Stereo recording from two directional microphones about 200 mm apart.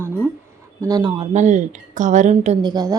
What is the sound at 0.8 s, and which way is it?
Speech, 20° right (ahead or behind).